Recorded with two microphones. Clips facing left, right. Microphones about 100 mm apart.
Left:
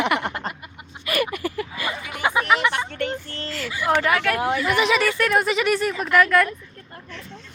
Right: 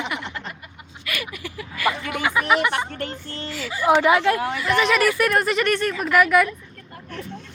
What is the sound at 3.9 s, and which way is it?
Speech, 20° right (ahead or behind).